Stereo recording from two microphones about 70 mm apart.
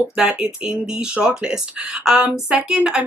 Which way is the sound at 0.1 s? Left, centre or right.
Centre.